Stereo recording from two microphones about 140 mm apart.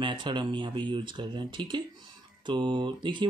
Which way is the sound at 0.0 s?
35° right (ahead or behind).